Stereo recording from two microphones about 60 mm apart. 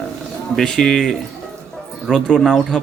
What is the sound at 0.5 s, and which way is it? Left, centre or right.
Speech, centre.